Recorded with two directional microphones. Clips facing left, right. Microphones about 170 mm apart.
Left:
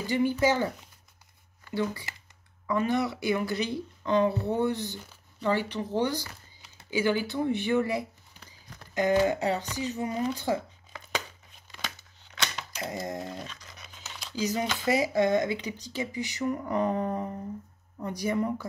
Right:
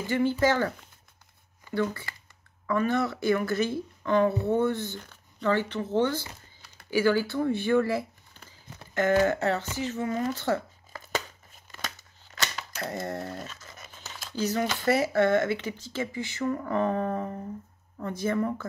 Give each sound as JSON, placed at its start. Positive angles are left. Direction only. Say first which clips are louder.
{"t": 0.0, "sound": "speech", "louder": "right 1 dB", "side_deg": 15}
{"t": 1.8, "sound": "speech", "louder": "right 2 dB", "side_deg": 20}
{"t": 11.7, "sound": "a sound", "louder": "right 1 dB", "side_deg": 0}
{"t": 13.0, "sound": "speech", "louder": "right 1 dB", "side_deg": 15}
{"t": 13.3, "sound": "crumpling", "louder": "right 1 dB", "side_deg": 0}
{"t": 14.3, "sound": "speech", "louder": "right 2 dB", "side_deg": 15}